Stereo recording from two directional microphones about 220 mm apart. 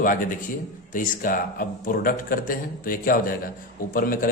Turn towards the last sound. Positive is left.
turn(degrees=40)  # may be behind; listen again after turning